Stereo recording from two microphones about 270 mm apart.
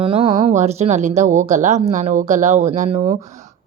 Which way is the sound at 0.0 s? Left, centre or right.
Centre.